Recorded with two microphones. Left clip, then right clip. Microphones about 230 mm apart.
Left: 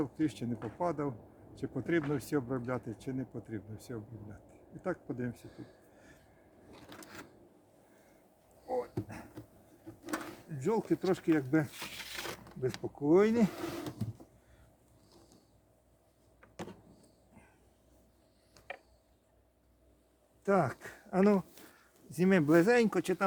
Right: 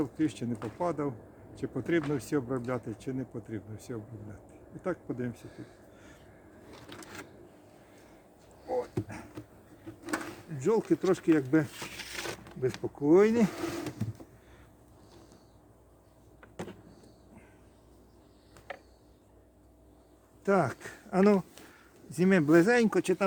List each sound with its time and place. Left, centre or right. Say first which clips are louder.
0.0 s speech: right 3 dB; centre
6.7 s a sound: right 4 dB; centre
8.6 s a sound: right 3 dB; centre
12.8 s speech: right 4 dB; centre
13.5 s speech: right 4 dB; centre
16.4 s vehicle: right 3 dB; centre
18.7 s a sound: right 2 dB; centre
20.4 s speech: right 3 dB; centre
22.1 s speech: right 3 dB; centre